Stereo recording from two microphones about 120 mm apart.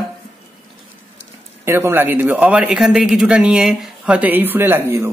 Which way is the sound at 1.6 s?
20° right (ahead or behind).